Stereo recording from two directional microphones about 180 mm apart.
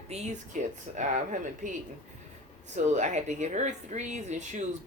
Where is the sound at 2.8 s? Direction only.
40° right (ahead or behind).